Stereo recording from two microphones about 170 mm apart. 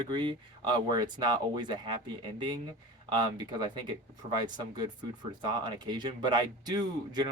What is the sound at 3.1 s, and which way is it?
Speech, 25° right (ahead or behind).